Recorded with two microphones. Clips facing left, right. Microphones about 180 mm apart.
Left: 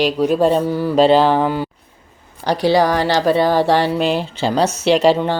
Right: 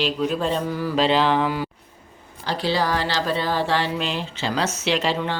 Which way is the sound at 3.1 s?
65° left (ahead or behind).